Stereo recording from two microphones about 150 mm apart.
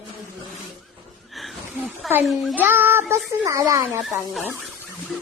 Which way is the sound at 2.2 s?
Centre (ahead or behind).